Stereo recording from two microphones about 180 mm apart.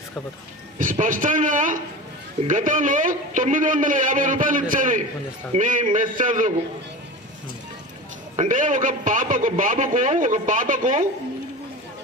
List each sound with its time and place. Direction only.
0.8 s a man's voice: 45° right (ahead or behind)
8.4 s a man's voice: 45° right (ahead or behind)